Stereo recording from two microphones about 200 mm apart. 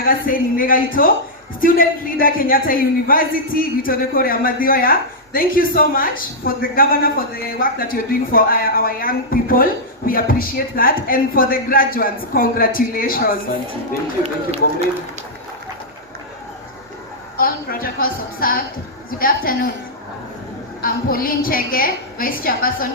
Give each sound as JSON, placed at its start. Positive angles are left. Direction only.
{"t": 0.0, "sound": "speech", "side_deg": 45}
{"t": 17.3, "sound": "speech", "side_deg": 45}
{"t": 20.8, "sound": "speech", "side_deg": 45}